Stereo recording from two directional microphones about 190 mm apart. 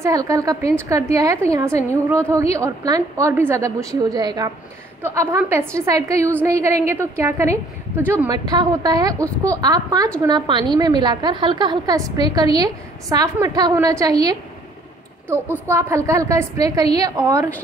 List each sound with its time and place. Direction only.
0.0 s a woman's voice: 15° right (ahead or behind)